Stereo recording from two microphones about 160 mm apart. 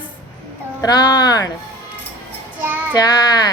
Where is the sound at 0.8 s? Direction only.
25° left (ahead or behind).